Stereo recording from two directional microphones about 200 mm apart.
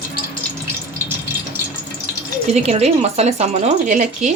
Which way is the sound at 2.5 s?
35° right (ahead or behind).